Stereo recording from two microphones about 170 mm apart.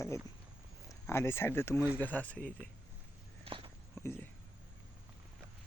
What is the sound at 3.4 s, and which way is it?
Walk, 30° right (ahead or behind).